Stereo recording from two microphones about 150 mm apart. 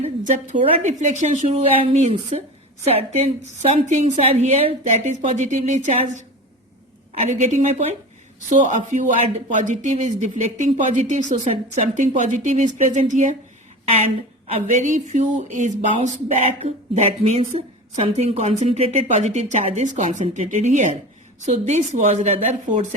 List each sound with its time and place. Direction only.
0.0 s speech: 55° right (ahead or behind)
14.4 s speech: 55° right (ahead or behind)